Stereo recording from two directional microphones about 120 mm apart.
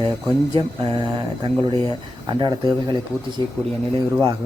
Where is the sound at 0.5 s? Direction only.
45° right (ahead or behind).